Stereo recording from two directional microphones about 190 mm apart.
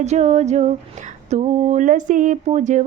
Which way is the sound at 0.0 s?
35° right (ahead or behind).